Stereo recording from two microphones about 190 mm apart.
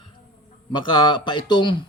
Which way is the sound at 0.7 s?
25° left (ahead or behind).